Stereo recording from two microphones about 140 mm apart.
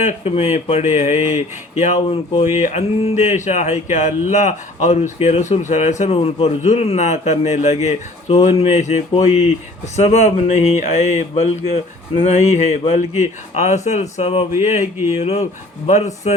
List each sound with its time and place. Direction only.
0.0 s speech: 50° left (ahead or behind)
14.6 s speech: 60° left (ahead or behind)
14.9 s speech: 15° right (ahead or behind)
15.2 s speech: 50° left (ahead or behind)